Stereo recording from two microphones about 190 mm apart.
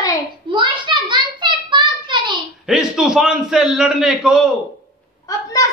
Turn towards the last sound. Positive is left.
turn(degrees=15)  # may be behind; listen again after turning